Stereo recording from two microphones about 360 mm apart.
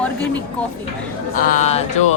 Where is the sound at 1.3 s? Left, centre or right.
Left.